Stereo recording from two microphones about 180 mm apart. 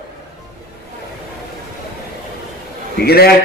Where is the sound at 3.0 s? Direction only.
60° left (ahead or behind).